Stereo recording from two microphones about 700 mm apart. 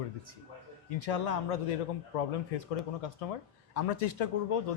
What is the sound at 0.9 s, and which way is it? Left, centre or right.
Speech, left.